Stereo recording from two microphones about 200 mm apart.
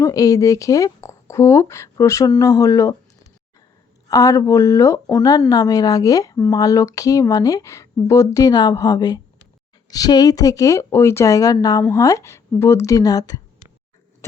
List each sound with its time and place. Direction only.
0.0 s speech: 15° left (ahead or behind)
4.1 s speech: 15° left (ahead or behind)